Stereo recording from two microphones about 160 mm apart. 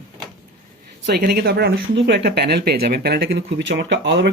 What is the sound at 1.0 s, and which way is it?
Speech, 85° right.